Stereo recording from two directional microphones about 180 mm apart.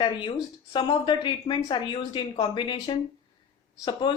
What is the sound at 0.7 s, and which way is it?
Speech, 25° left (ahead or behind).